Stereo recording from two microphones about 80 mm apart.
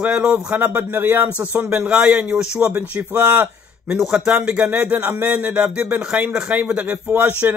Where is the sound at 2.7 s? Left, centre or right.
Right.